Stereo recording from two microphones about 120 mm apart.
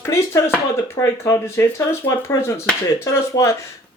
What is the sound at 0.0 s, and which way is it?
Speech, 25° left (ahead or behind).